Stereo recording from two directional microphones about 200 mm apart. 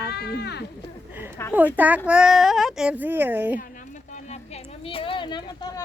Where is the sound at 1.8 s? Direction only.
10° right (ahead or behind).